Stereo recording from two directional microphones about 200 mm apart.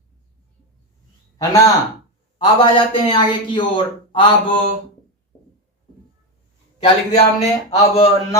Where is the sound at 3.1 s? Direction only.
25° left (ahead or behind).